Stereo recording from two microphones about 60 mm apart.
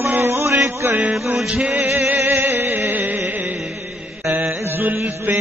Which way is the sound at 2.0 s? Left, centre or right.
Right.